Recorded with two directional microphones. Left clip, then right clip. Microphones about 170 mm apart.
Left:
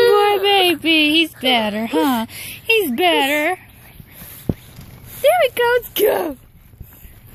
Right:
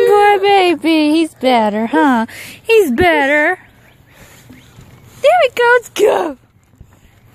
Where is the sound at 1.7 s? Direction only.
35° right (ahead or behind).